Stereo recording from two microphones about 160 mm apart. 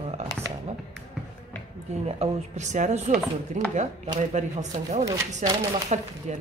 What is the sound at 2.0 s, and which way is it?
Speech, 45° right (ahead or behind).